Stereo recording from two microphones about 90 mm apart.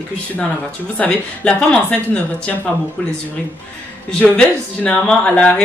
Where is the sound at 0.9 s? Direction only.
10° left (ahead or behind).